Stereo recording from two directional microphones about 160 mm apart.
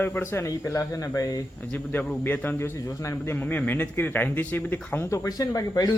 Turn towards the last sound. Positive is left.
turn(degrees=25)  # may be behind; listen again after turning